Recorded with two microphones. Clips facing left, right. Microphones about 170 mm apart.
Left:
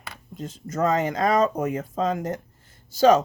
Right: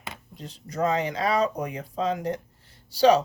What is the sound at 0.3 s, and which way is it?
Speech, 45° left (ahead or behind).